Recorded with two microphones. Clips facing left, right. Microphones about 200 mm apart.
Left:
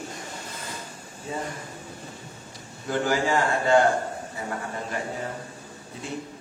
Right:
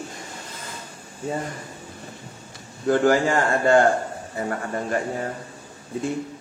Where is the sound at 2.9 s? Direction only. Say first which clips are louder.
Right 6 dB; 50° right (ahead or behind).